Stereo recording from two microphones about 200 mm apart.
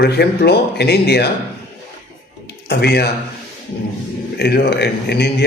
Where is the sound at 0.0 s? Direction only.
55° left (ahead or behind).